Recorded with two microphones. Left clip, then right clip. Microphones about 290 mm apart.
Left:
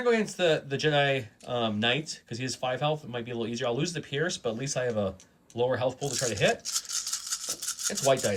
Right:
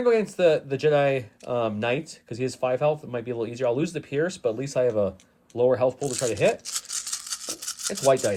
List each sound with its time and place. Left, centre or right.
0.0 s speech: centre
6.0 s speech: right
6.3 s speech: centre
6.7 s rub: right